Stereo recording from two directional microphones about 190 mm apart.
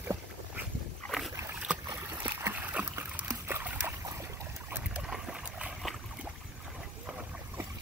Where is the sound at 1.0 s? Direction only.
Centre (ahead or behind).